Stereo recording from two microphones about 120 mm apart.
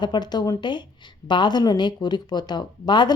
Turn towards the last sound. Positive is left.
turn(degrees=40)  # may be behind; listen again after turning